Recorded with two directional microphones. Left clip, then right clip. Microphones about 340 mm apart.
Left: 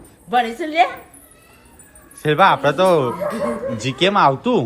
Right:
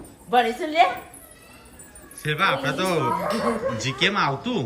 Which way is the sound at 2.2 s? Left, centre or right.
Centre.